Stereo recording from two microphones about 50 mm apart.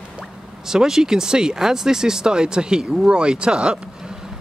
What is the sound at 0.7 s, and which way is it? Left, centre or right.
Speech, centre.